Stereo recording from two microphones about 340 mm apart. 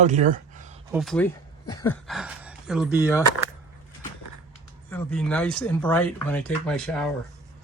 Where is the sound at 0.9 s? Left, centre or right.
Centre.